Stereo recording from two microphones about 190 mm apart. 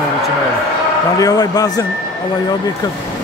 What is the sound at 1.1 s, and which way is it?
Speech, 20° left (ahead or behind).